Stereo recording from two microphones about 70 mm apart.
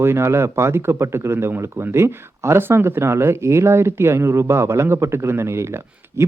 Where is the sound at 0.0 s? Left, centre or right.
Right.